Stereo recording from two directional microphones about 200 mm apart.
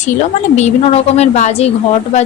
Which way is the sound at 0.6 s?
30° left (ahead or behind).